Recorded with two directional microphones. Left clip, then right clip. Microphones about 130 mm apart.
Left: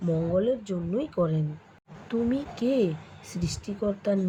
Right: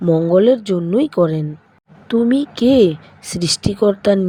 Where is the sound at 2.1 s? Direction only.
90° right.